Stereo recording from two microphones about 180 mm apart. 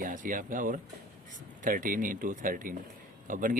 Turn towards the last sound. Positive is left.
turn(degrees=-50)  # may be behind; listen again after turning